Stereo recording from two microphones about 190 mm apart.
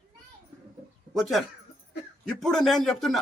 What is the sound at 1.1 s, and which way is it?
Speech, centre (ahead or behind).